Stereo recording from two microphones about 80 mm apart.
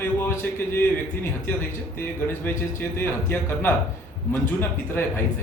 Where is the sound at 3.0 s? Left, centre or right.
Left.